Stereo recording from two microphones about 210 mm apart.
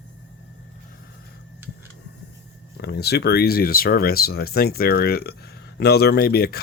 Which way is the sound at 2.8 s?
50° left (ahead or behind).